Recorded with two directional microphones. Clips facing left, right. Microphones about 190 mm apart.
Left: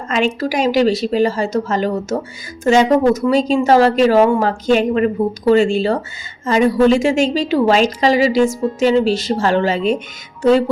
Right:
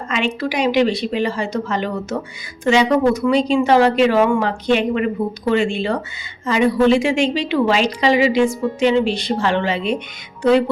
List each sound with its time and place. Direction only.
0.1 s a woman's voice: 45° left (ahead or behind)